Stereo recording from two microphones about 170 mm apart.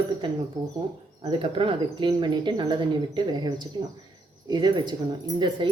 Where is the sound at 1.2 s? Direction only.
30° right (ahead or behind).